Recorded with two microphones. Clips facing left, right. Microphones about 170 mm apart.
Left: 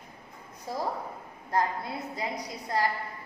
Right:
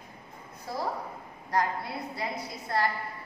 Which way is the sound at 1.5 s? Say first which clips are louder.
Even; 20° left (ahead or behind).